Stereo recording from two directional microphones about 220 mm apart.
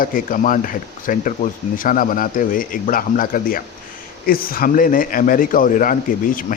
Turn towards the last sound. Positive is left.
turn(degrees=40)  # may be behind; listen again after turning